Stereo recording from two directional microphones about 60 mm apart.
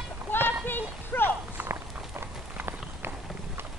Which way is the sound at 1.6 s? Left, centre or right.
Right.